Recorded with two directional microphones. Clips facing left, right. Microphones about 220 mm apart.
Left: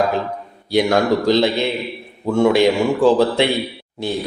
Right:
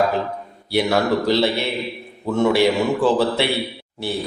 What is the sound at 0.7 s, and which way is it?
A man's voice, 15° left (ahead or behind).